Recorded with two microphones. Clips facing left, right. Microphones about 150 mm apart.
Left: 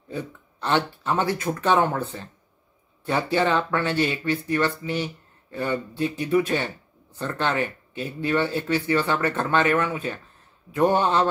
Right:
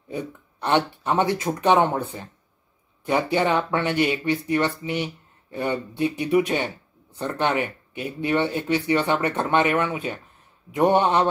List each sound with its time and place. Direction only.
0.1 s speech: 15° right (ahead or behind)